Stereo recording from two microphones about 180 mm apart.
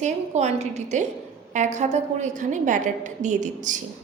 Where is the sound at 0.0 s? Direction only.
40° right (ahead or behind).